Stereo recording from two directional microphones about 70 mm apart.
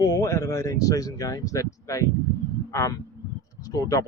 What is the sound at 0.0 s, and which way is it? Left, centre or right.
Speech, left.